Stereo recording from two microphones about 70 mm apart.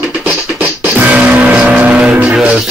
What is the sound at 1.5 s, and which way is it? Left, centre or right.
Vehicle, centre.